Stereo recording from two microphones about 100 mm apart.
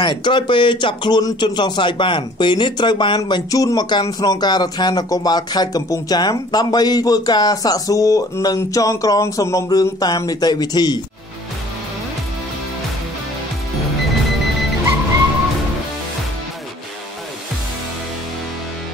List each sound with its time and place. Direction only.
0.0 s speech: 55° left (ahead or behind)